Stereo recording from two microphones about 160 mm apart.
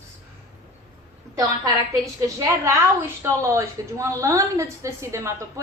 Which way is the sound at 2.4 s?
20° right (ahead or behind).